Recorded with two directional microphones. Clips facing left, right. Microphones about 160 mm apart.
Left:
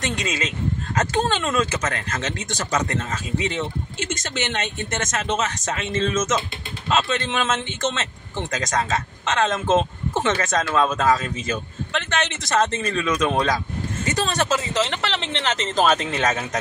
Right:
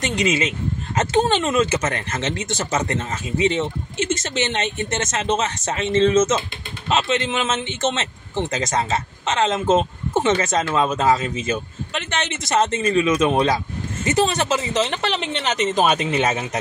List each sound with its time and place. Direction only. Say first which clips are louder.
0.0 s speech: right 5 dB; 20° right (ahead or behind)